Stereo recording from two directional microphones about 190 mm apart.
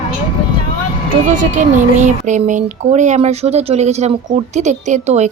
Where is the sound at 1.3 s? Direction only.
40° right (ahead or behind).